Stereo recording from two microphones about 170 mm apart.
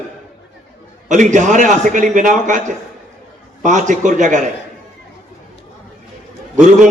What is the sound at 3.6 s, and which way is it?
Speech, 45° right (ahead or behind).